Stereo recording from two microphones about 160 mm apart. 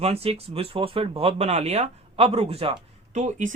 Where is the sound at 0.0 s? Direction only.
40° right (ahead or behind).